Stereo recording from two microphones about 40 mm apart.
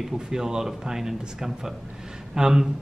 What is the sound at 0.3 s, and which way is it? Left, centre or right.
A man's voice, centre.